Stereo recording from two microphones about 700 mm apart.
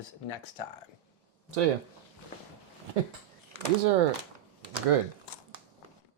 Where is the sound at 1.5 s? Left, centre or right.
Right.